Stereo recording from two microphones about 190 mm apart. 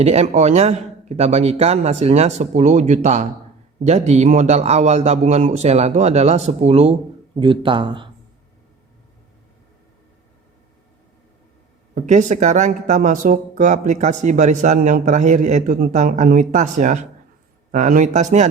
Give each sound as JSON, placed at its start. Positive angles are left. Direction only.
{"t": 0.0, "sound": "speech", "side_deg": -35}
{"t": 11.9, "sound": "speech", "side_deg": -40}